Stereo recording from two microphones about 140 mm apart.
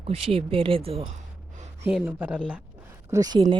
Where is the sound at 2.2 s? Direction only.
10° right (ahead or behind).